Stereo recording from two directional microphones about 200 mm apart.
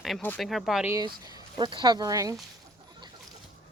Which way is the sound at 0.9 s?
20° right (ahead or behind).